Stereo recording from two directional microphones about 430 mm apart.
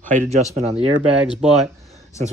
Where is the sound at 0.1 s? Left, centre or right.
Centre.